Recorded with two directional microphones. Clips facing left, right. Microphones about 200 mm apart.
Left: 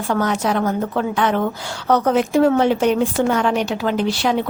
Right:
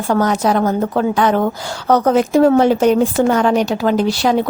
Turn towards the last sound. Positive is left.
turn(degrees=-40)  # may be behind; listen again after turning